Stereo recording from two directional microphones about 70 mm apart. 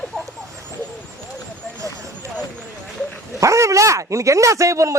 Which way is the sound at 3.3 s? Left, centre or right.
Right.